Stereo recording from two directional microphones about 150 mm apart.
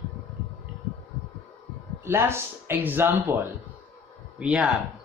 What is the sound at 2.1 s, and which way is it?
Speech, 15° right (ahead or behind).